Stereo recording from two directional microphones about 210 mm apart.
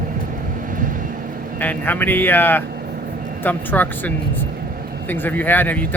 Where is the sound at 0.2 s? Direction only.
40° right (ahead or behind).